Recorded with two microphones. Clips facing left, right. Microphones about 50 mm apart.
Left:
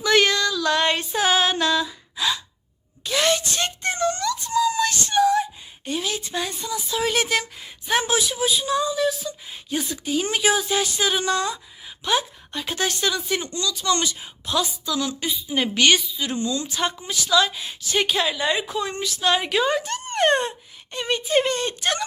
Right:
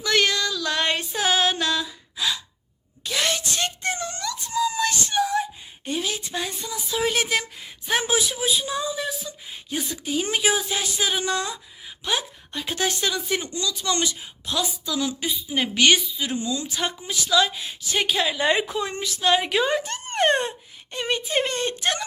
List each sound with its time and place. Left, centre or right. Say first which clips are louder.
0.0 s a sound: left 3 dB; centre
0.5 s gasp: left 3 dB; centre
3.0 s a sound: left 4 dB; centre
6.9 s speech: left 1 dB; centre
8.0 s speech: left 1 dB; centre
9.5 s a sound: left 2 dB; centre
10.0 s speech: left 1 dB; centre
13.0 s speech: left 1 dB; centre
14.2 s a woman's voice: left 3 dB; centre
14.8 s speech: left 1 dB; centre
18.3 s a woman's voice: right 2 dB; right
18.7 s speech: left 1 dB; centre